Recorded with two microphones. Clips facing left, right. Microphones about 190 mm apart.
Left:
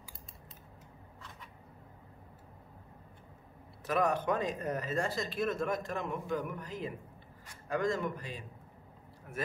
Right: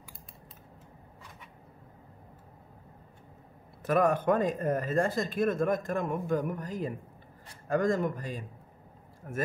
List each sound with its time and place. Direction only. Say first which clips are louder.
3.8 s speech: right 5 dB; 50° right (ahead or behind)